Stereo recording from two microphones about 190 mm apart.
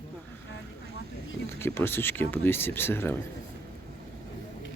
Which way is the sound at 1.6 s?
10° left (ahead or behind).